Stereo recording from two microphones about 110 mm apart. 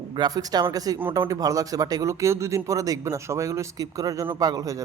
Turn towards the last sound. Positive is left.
turn(degrees=-35)  # may be behind; listen again after turning